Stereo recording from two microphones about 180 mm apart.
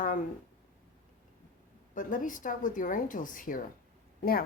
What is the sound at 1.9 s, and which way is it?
A woman's voice, 45° left (ahead or behind).